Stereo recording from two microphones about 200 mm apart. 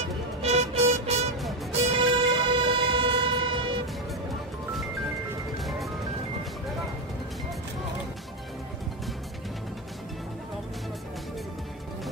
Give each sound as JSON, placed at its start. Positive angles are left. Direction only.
{"t": 0.4, "sound": "music", "side_deg": -30}
{"t": 5.6, "sound": "music", "side_deg": 0}